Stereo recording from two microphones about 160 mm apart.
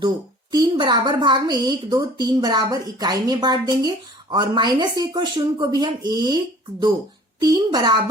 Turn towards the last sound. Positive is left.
turn(degrees=-25)  # may be behind; listen again after turning